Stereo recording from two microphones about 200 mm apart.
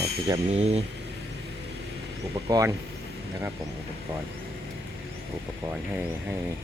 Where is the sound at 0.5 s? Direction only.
30° right (ahead or behind).